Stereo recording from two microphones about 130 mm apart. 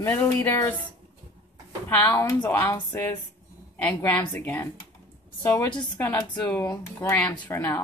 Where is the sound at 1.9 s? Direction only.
20° left (ahead or behind).